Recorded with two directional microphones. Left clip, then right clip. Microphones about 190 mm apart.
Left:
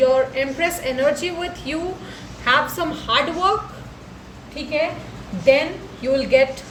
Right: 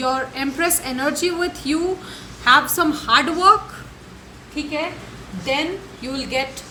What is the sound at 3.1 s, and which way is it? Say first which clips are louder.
Speech: right 4 dB; 60° right (ahead or behind).